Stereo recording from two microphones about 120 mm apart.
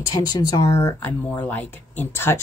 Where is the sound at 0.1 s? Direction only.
35° left (ahead or behind).